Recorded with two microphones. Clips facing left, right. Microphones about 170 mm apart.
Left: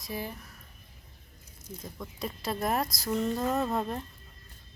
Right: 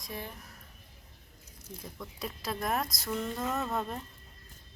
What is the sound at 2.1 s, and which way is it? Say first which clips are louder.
Speech: left 3 dB; centre (ahead or behind).